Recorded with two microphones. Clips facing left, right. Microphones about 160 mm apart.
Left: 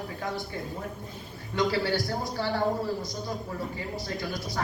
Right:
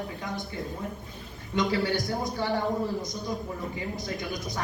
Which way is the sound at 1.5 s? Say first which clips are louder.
Even; 20° right (ahead or behind).